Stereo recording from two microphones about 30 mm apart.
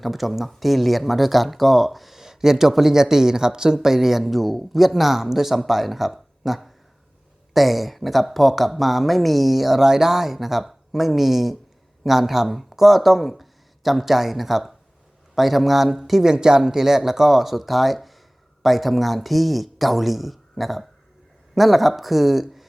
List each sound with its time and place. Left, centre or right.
0.0 s speech: centre; by 3.8 s right
3.8 s speech: centre
16.3 s speech: right; by 22.6 s centre